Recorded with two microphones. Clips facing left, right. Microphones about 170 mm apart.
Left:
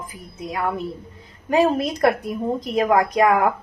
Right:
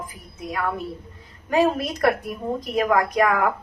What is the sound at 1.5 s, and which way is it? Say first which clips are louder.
A woman's voice: left 2 dB; 20° left (ahead or behind).